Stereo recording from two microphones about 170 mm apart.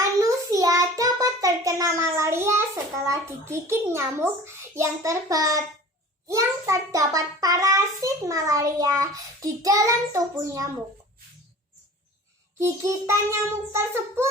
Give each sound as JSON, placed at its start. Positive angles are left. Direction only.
{"t": 0.0, "sound": "child singing", "side_deg": -20}
{"t": 3.1, "sound": "a child's voice", "side_deg": -15}
{"t": 12.5, "sound": "a child's voice", "side_deg": -15}